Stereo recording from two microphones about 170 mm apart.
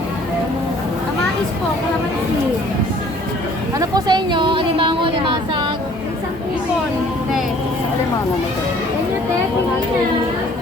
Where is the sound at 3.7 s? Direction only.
25° right (ahead or behind).